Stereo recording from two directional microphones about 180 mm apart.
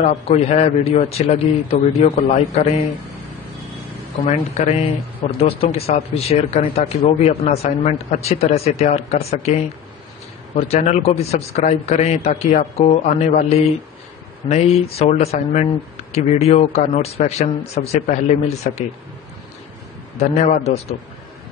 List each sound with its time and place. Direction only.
0.0 s speech: 35° left (ahead or behind)
4.3 s speech: 40° left (ahead or behind)
20.2 s speech: 35° left (ahead or behind)